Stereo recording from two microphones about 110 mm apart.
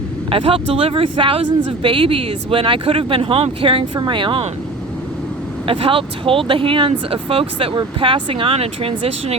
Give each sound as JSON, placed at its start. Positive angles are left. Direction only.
{"t": 0.3, "sound": "speech", "side_deg": -55}
{"t": 5.6, "sound": "speech", "side_deg": -55}